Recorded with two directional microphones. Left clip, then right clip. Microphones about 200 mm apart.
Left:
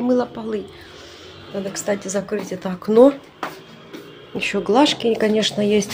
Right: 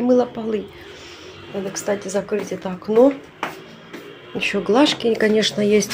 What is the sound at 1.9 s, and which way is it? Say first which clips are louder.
Speech: right 1 dB; 5° left (ahead or behind).